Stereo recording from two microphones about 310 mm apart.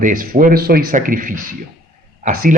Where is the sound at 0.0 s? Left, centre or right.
Right.